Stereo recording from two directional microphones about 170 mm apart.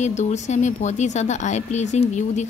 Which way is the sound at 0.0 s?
45° left (ahead or behind).